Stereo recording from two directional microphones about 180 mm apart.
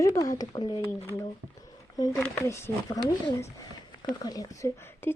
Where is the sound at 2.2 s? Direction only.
15° left (ahead or behind).